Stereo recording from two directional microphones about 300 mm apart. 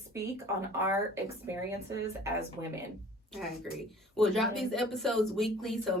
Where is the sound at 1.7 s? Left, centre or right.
Centre.